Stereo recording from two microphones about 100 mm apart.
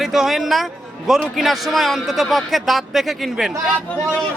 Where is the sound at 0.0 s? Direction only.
5° right (ahead or behind).